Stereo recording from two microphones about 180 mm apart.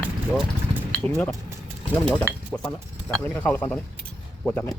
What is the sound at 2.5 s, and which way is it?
Speech, 5° left (ahead or behind).